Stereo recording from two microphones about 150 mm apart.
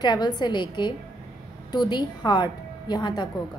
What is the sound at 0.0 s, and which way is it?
A woman's voice, 30° left (ahead or behind).